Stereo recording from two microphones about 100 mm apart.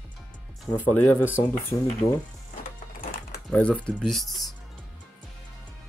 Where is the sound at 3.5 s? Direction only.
10° left (ahead or behind).